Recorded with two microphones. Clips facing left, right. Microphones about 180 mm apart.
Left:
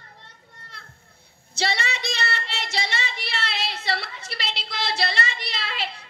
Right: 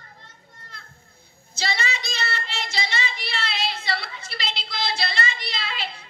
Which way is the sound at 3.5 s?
70° left (ahead or behind).